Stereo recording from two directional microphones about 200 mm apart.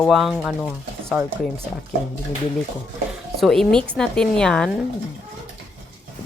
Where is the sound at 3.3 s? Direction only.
Centre (ahead or behind).